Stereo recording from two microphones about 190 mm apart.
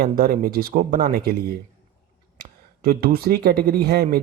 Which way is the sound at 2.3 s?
50° right (ahead or behind).